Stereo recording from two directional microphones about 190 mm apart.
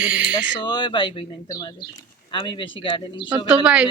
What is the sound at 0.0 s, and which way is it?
Speech, 5° right (ahead or behind).